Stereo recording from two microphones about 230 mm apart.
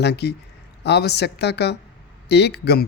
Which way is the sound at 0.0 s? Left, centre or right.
Left.